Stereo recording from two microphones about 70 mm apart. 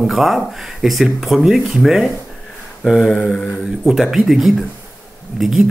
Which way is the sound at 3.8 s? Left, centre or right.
Centre.